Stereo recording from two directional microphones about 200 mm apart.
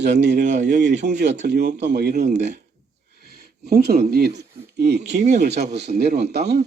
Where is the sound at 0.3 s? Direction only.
35° right (ahead or behind).